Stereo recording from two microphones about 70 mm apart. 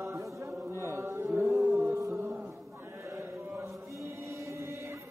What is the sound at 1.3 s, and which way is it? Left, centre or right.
Roaring cats, right.